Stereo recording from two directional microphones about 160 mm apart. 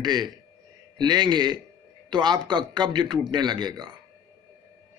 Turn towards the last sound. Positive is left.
turn(degrees=-25)  # may be behind; listen again after turning